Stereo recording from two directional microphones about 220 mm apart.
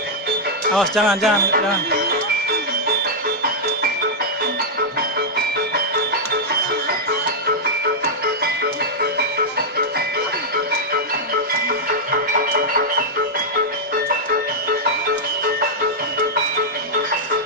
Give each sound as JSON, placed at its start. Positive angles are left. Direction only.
{"t": 0.7, "sound": "speech", "side_deg": 0}
{"t": 1.5, "sound": "speech", "side_deg": -45}